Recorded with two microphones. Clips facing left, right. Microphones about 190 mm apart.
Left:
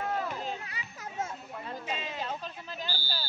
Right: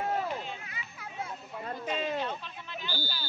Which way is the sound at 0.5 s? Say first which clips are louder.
Left 4 dB; 40° left (ahead or behind).